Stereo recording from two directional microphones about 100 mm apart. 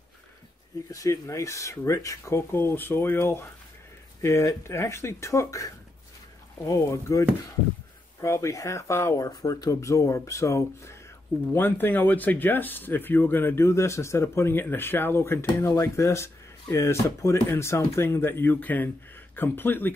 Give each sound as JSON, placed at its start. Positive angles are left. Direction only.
{"t": 0.8, "sound": "speech", "side_deg": 35}